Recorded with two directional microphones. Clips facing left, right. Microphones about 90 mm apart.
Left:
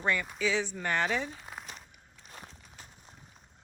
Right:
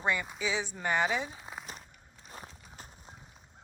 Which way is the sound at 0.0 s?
15° right (ahead or behind).